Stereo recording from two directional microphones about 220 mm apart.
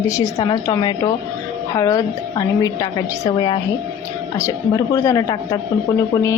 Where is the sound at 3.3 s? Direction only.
20° left (ahead or behind).